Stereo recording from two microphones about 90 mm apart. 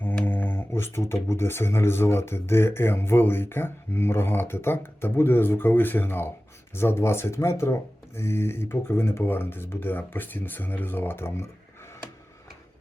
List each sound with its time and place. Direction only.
0.0 s speech: 25° left (ahead or behind)